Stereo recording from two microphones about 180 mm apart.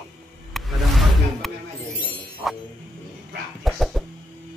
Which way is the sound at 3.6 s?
Centre (ahead or behind).